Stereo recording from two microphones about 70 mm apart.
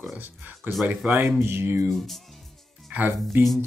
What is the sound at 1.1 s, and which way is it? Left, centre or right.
Speech, right.